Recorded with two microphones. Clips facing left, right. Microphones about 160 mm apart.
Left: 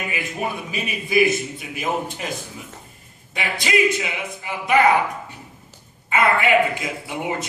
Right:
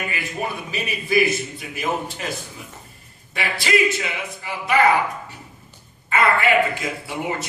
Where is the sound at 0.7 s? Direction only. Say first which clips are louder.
Right 2 dB; 20° left (ahead or behind).